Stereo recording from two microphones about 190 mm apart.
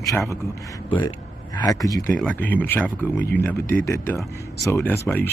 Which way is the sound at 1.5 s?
20° left (ahead or behind).